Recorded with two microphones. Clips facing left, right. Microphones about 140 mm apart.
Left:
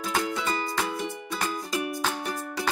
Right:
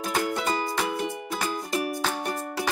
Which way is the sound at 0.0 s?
15° right (ahead or behind).